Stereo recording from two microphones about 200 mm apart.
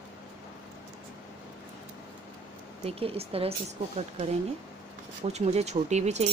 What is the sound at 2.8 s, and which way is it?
Speech, 30° right (ahead or behind).